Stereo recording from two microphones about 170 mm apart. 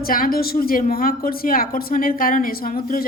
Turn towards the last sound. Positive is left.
turn(degrees=60)  # may be behind; listen again after turning